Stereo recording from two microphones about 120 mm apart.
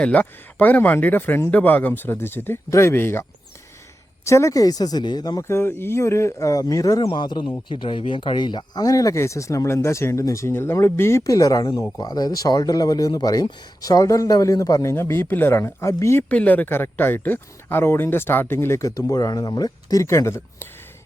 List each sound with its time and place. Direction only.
0.0 s speech: 15° left (ahead or behind); by 7.0 s 30° left (ahead or behind)
7.0 s speech: 40° left (ahead or behind); by 16.2 s 25° left (ahead or behind)
16.3 s speech: 15° left (ahead or behind)